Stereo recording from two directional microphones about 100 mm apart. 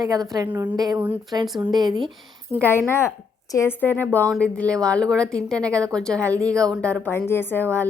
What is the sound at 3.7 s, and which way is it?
A woman's voice, 20° left (ahead or behind).